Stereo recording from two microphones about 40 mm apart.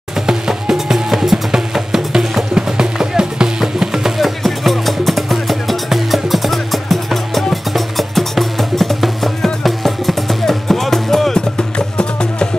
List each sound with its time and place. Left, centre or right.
0.3 s music: centre
4.2 s music: centre
11.3 s music: left